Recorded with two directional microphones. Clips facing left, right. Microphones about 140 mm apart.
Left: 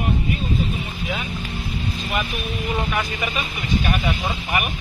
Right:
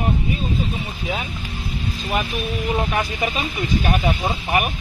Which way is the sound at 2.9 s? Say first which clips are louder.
Right 2 dB; 35° right (ahead or behind).